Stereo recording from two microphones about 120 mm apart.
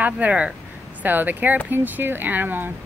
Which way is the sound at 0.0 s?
10° right (ahead or behind).